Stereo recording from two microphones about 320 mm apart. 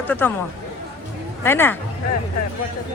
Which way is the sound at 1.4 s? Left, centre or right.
Centre.